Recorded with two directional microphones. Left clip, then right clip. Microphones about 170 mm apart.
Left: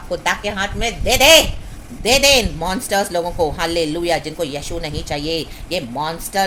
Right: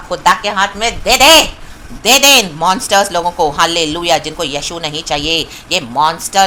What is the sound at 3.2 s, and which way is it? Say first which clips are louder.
Speech: right 6 dB; 40° right (ahead or behind).